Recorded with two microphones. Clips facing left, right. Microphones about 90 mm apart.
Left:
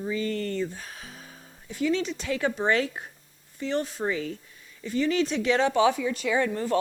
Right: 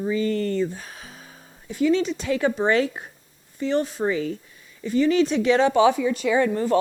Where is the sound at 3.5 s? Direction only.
20° right (ahead or behind).